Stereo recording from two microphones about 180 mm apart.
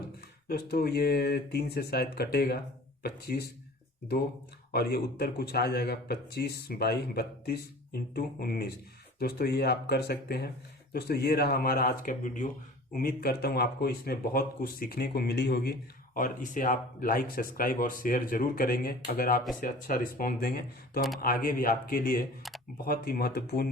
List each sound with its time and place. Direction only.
0.4 s speech: 60° left (ahead or behind)
4.7 s speech: 60° left (ahead or behind)
16.1 s speech: 50° left (ahead or behind)